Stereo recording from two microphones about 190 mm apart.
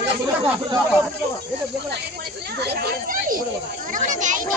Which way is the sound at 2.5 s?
55° right (ahead or behind).